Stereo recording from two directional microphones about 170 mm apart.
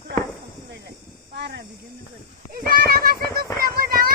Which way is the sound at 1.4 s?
75° right (ahead or behind).